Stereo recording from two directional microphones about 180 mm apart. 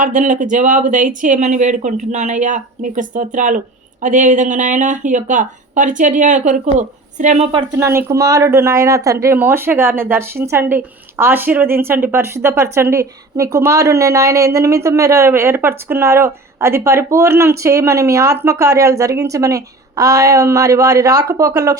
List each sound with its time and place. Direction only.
0.0 s a woman's voice: 45° right (ahead or behind)
7.5 s speech: 20° right (ahead or behind)